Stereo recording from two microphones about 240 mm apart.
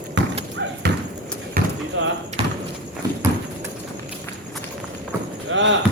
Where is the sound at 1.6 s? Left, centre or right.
Right.